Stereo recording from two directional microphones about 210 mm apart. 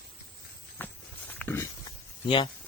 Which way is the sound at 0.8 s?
10° left (ahead or behind).